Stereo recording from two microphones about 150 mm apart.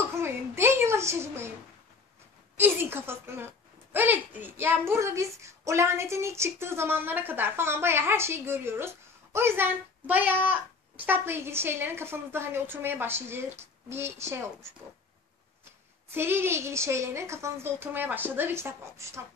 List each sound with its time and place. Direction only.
0.1 s a woman's voice: 15° right (ahead or behind)
2.5 s a woman's voice: 15° right (ahead or behind)
16.1 s a woman's voice: 15° right (ahead or behind)